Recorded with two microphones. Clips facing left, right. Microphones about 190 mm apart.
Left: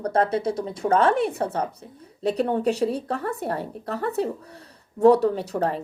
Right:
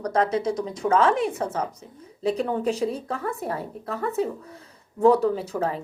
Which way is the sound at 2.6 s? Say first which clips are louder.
Left 2 dB; 65° left (ahead or behind).